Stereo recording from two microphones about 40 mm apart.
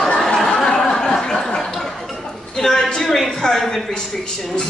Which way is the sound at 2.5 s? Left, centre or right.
Centre.